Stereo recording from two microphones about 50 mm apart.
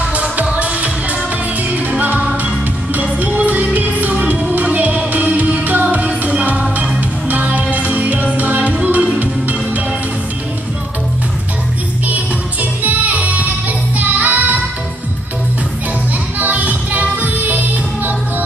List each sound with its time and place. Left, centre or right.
0.1 s music: right
12.8 s music: right
16.3 s music: right